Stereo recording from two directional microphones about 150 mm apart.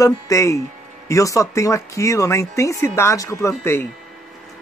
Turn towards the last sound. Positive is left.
turn(degrees=15)  # may be behind; listen again after turning